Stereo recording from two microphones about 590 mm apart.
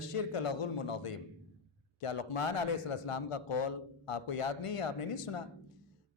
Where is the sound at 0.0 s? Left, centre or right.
Left.